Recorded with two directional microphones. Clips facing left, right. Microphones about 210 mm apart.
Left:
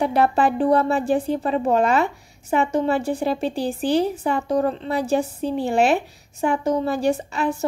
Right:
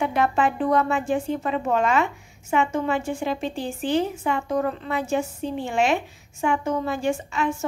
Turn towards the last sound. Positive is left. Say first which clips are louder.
# left 3 dB
turn(degrees=35)  # may be behind; listen again after turning